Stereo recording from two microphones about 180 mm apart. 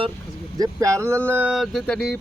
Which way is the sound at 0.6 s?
20° right (ahead or behind).